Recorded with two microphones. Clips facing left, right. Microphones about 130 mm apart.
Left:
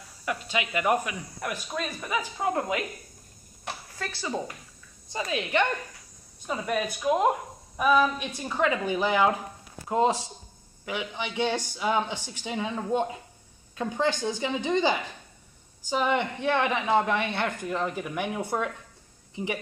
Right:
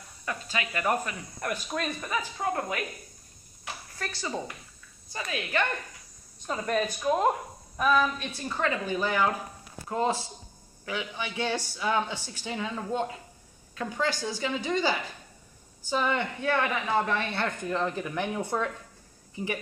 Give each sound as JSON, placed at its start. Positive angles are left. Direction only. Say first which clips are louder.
{"t": 0.2, "sound": "speech", "louder": "left 3 dB", "side_deg": 15}
{"t": 5.1, "sound": "a woman's voice", "louder": "left 4 dB", "side_deg": 25}
{"t": 6.4, "sound": "a woman's voice", "louder": "even", "side_deg": 10}